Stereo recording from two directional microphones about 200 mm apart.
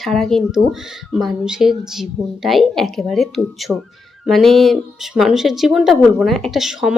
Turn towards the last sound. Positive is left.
turn(degrees=0)  # may be behind; listen again after turning